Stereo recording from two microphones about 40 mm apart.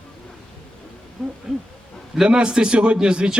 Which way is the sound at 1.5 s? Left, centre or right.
Centre.